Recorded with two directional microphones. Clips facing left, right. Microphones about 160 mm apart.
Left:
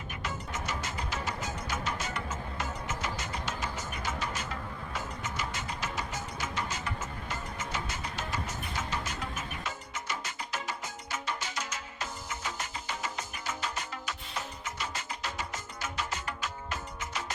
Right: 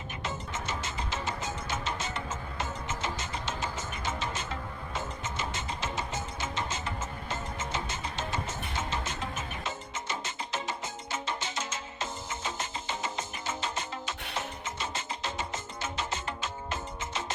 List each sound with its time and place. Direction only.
0.2 s music: 25° right (ahead or behind)